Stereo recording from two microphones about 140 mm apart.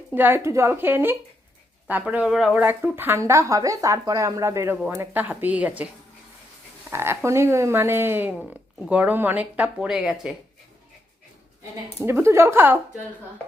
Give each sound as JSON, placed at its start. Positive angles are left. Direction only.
{"t": 0.1, "sound": "speech", "side_deg": -15}
{"t": 2.6, "sound": "speech", "side_deg": -15}
{"t": 6.9, "sound": "speech", "side_deg": -15}
{"t": 12.0, "sound": "speech", "side_deg": -20}